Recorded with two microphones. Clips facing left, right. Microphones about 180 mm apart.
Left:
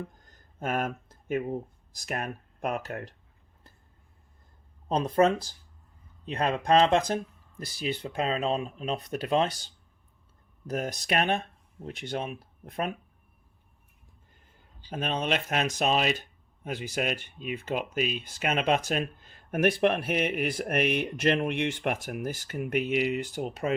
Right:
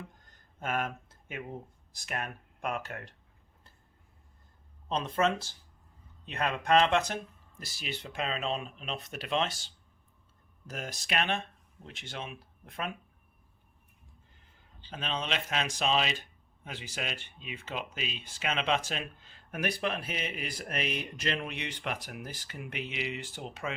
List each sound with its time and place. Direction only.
0.6 s speech: 40° left (ahead or behind)
4.9 s speech: 40° left (ahead or behind)
10.7 s speech: 45° left (ahead or behind)
14.9 s speech: 50° left (ahead or behind)